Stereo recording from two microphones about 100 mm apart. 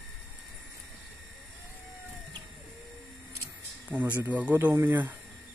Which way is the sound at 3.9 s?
20° right (ahead or behind).